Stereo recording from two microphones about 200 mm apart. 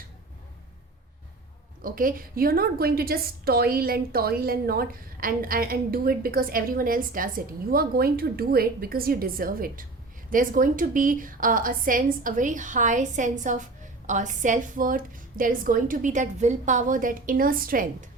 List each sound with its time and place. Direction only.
1.8 s a woman's voice: 45° right (ahead or behind)